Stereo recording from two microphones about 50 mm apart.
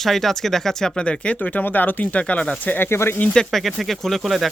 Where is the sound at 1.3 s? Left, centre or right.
Left.